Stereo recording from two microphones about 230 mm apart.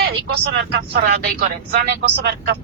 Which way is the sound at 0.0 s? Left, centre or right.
Right.